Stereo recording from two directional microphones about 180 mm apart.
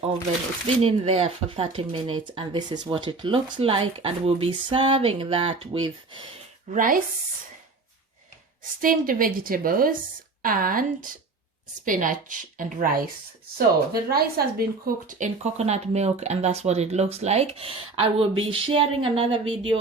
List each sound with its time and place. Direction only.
0.8 s speech: 35° right (ahead or behind)
6.7 s a woman's voice: 50° right (ahead or behind)
8.8 s a woman's voice: 50° right (ahead or behind)
15.0 s speech: 45° right (ahead or behind); by 19.8 s 30° right (ahead or behind)